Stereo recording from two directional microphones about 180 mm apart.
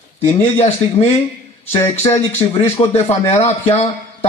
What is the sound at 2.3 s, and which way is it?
A man's voice, 35° left (ahead or behind).